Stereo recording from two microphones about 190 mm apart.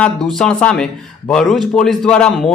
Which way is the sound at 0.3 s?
5° left (ahead or behind).